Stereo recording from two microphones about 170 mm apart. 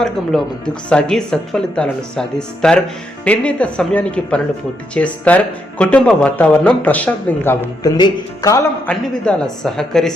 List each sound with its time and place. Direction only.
0.0 s speech: centre (ahead or behind)
7.9 s speech: 25° left (ahead or behind)
8.9 s speech: 5° left (ahead or behind)